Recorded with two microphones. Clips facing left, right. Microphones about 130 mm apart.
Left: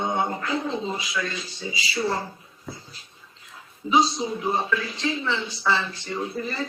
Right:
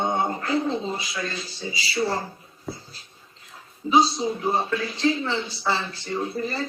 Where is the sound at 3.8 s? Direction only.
35° right (ahead or behind).